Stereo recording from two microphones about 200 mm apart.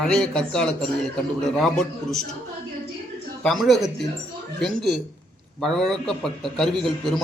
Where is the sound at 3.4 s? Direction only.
Centre (ahead or behind).